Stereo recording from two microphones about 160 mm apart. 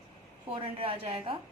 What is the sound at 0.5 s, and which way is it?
Speech, 35° right (ahead or behind).